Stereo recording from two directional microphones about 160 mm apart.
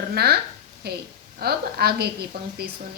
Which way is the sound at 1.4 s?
80° right.